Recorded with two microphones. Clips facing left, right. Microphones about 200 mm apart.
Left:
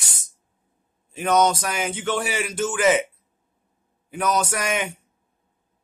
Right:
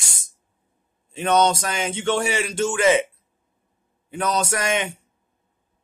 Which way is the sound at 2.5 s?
25° right (ahead or behind).